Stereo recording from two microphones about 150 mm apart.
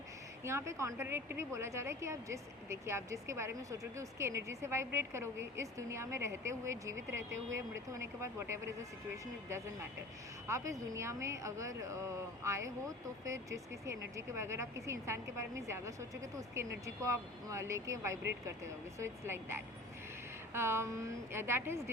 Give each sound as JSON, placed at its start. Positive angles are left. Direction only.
{"t": 0.4, "sound": "a woman's voice", "side_deg": -20}
{"t": 10.4, "sound": "a woman's voice", "side_deg": -20}